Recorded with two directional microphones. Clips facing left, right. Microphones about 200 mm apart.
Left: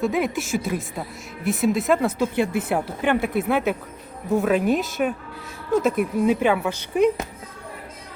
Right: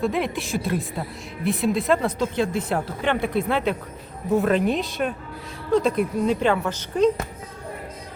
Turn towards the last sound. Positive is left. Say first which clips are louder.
# even
turn(degrees=10)  # may be behind; listen again after turning